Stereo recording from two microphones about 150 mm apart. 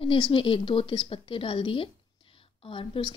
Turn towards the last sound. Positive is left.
turn(degrees=35)  # may be behind; listen again after turning